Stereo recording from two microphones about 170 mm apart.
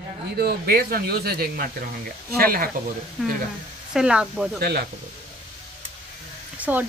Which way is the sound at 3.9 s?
5° right (ahead or behind).